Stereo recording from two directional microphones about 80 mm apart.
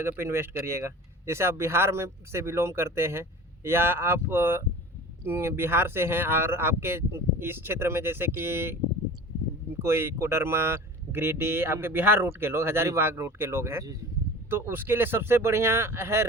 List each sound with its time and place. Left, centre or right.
0.0 s speech: right